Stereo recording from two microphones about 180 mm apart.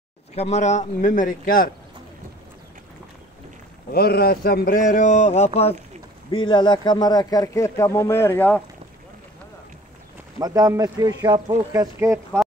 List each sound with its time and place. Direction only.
0.4 s speech: 40° left (ahead or behind)
3.9 s speech: 60° left (ahead or behind); by 8.6 s 10° left (ahead or behind)
10.4 s speech: 20° right (ahead or behind)